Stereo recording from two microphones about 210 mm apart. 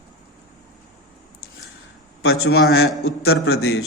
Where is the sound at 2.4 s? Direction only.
50° left (ahead or behind).